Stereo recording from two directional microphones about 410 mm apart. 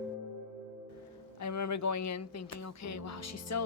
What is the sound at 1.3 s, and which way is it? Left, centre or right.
A woman's voice, left.